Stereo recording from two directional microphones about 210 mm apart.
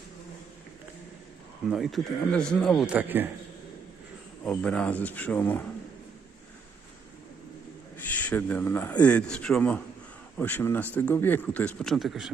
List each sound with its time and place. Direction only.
1.7 s speech: centre (ahead or behind)
4.4 s speech: 5° left (ahead or behind)
7.9 s a man's voice: 10° left (ahead or behind)